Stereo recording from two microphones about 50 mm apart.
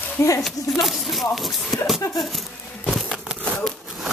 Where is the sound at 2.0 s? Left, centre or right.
Left.